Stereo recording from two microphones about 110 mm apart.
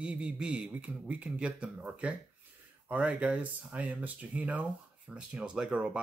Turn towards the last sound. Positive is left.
turn(degrees=-10)  # may be behind; listen again after turning